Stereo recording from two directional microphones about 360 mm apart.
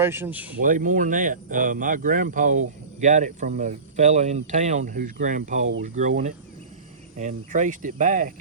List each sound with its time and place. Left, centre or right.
0.0 s speech: centre
0.6 s speech: right